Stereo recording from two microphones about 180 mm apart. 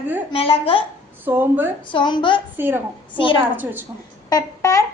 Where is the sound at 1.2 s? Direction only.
10° right (ahead or behind).